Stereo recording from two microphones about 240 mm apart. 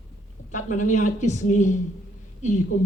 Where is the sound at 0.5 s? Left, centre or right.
Left.